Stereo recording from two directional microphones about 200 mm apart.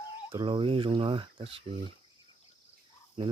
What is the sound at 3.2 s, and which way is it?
Speech, 25° right (ahead or behind).